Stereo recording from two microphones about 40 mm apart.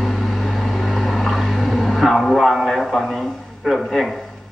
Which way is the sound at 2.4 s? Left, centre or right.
Centre.